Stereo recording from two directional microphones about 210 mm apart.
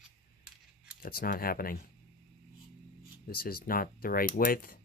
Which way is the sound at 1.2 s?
45° left (ahead or behind).